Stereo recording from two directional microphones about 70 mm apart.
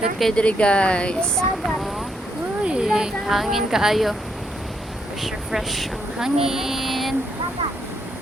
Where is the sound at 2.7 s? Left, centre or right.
Centre.